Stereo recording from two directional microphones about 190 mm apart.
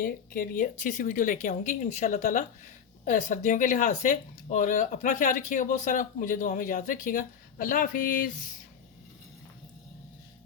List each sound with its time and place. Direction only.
0.0 s speech: 45° left (ahead or behind)